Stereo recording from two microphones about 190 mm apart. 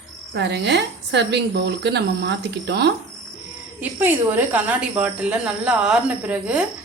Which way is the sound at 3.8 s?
10° right (ahead or behind).